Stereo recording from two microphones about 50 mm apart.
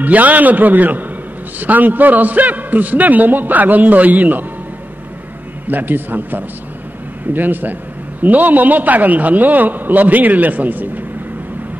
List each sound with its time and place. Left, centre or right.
0.0 s a man's voice: right
5.7 s a man's voice: right